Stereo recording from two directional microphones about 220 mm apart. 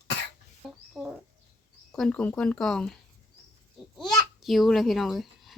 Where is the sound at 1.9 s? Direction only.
5° left (ahead or behind).